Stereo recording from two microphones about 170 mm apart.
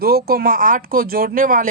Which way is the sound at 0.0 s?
65° right (ahead or behind).